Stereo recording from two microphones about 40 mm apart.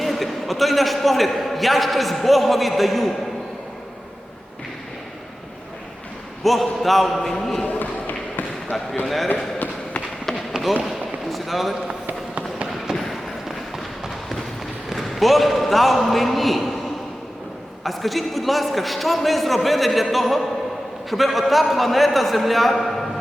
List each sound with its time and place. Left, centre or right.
0.0 s a man's voice: centre
6.4 s a man's voice: centre
7.8 s basketball bounce: left
9.0 s a man's voice: centre
10.8 s a sound: centre
12.9 s a sound: centre
13.7 s run: centre
14.9 s a man's voice: centre
17.8 s a man's voice: centre